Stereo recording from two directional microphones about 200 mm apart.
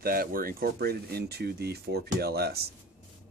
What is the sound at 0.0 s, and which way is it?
Speech, 45° right (ahead or behind).